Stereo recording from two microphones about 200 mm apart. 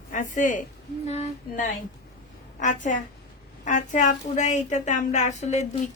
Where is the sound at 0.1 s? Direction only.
40° left (ahead or behind).